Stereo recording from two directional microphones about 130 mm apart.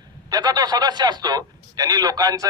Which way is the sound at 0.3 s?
30° right (ahead or behind).